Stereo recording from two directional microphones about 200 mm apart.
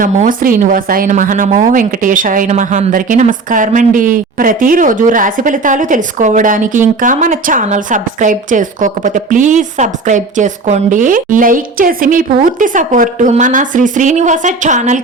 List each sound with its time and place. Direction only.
0.0 s a woman's voice: 40° right (ahead or behind)